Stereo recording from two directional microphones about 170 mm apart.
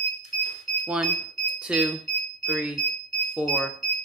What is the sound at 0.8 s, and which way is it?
Speech, 5° right (ahead or behind).